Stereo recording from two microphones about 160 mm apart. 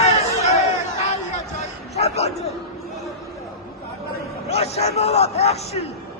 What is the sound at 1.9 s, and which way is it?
Speech, 40° left (ahead or behind).